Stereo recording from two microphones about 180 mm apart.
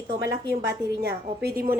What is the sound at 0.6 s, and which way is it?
A woman's voice, 60° right (ahead or behind).